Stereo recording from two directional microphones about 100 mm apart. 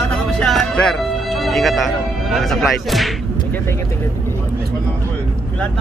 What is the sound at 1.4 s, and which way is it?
Speech, centre (ahead or behind).